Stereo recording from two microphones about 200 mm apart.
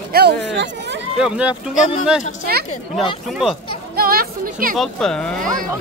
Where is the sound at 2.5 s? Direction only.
50° right (ahead or behind).